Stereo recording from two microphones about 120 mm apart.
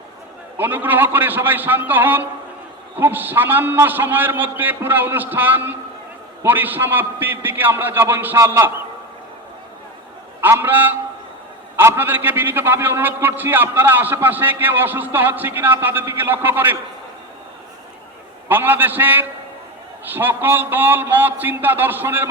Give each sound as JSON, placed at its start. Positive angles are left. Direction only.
{"t": 0.5, "sound": "a man's voice", "side_deg": -15}
{"t": 10.4, "sound": "a man's voice", "side_deg": -15}
{"t": 18.4, "sound": "a man's voice", "side_deg": -15}